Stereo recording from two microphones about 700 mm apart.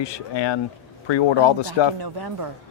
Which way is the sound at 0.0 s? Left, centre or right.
Left.